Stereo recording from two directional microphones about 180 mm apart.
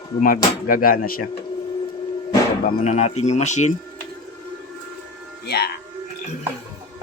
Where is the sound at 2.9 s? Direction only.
35° left (ahead or behind).